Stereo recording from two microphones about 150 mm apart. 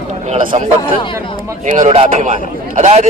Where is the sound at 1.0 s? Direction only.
35° left (ahead or behind).